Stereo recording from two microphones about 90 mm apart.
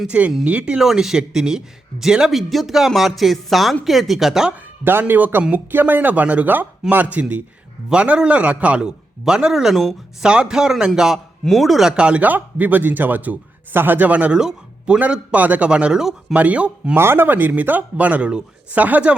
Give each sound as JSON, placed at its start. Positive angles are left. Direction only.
{"t": 0.1, "sound": "speech", "side_deg": -15}
{"t": 4.5, "sound": "a man's voice", "side_deg": -25}
{"t": 16.9, "sound": "speech", "side_deg": -25}